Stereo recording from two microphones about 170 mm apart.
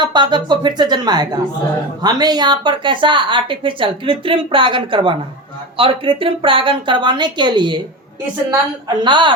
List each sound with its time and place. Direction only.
0.0 s a woman's voice: 25° right (ahead or behind)
9.0 s a woman's voice: 25° right (ahead or behind)